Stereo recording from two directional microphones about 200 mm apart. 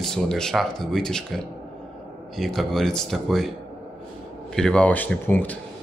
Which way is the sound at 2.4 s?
Centre (ahead or behind).